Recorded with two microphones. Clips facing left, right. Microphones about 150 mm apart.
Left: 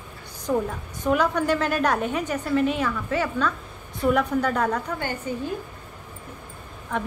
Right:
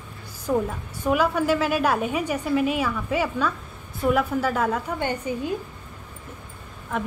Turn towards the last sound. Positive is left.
turn(degrees=-5)  # may be behind; listen again after turning